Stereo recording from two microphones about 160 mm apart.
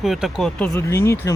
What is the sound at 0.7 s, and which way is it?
Speech, 15° left (ahead or behind).